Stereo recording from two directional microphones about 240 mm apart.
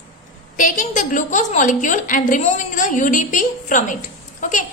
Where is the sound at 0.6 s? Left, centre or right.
Left.